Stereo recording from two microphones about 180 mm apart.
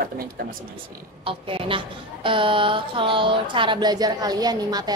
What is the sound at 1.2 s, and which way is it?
Speech, 30° right (ahead or behind).